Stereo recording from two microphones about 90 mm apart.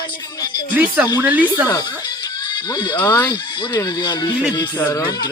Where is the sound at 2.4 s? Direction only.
55° left (ahead or behind).